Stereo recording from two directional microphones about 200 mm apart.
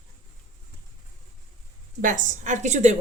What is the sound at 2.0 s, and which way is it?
Speech, 40° right (ahead or behind).